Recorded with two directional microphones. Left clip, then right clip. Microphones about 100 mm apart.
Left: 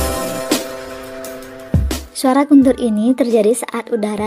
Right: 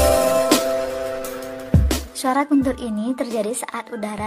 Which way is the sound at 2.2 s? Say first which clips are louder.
Left 8 dB; 35° left (ahead or behind).